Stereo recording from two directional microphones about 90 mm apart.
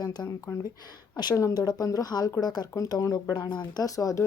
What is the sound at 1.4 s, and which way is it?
Speech, 40° left (ahead or behind).